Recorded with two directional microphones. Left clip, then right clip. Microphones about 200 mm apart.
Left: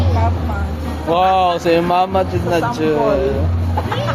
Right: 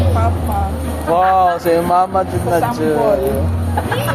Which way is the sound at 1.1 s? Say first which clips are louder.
Right 1 dB; 30° left (ahead or behind).